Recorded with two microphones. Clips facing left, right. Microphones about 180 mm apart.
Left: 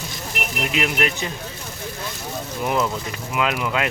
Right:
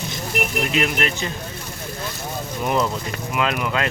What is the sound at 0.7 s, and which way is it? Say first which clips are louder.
Speech: right 1 dB; 10° left (ahead or behind).